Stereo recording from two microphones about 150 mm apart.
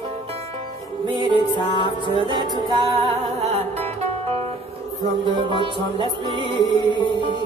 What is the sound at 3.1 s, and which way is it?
Music, 45° right (ahead or behind).